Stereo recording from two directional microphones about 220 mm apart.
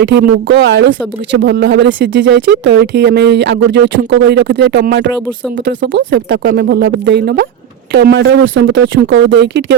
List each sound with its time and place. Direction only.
0.0 s speech: 50° right (ahead or behind)